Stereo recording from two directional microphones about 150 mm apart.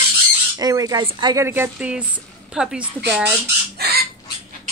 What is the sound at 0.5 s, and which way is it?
A woman's voice, 25° right (ahead or behind).